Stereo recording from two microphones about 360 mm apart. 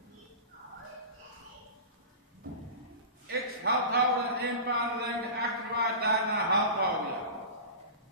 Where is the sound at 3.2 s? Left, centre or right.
Right.